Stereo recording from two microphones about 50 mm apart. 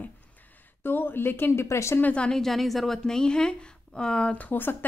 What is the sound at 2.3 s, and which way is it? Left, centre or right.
A woman's voice, centre.